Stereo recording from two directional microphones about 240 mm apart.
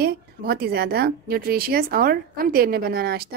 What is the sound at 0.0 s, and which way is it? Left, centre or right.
Speech, right.